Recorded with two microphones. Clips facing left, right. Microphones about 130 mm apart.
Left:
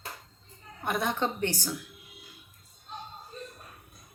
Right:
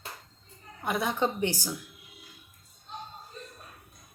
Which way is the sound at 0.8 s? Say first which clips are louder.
Right 1 dB; 5° right (ahead or behind).